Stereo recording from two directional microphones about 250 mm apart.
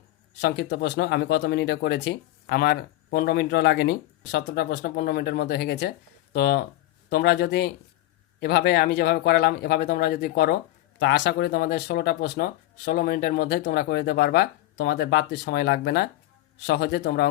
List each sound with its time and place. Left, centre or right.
0.4 s a man's voice: left